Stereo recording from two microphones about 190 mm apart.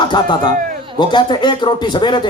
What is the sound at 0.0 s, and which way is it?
Speech, 25° left (ahead or behind).